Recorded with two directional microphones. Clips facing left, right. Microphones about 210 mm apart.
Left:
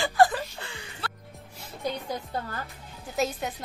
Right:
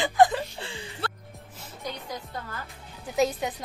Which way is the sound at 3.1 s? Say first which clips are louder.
Right 4 dB; centre (ahead or behind).